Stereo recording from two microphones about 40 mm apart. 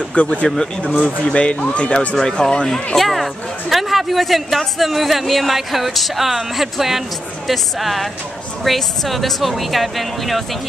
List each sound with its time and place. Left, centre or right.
0.1 s speech: left
0.6 s speech: centre
1.2 s speech: left
3.0 s speech: centre